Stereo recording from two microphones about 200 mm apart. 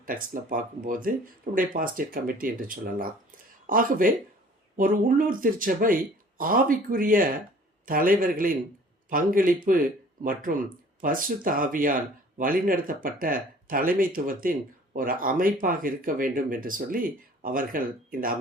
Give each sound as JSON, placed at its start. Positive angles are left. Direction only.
{"t": 0.0, "sound": "speech", "side_deg": -45}